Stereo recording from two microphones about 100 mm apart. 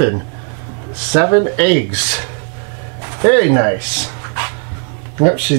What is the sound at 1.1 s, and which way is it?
Speech, 20° right (ahead or behind).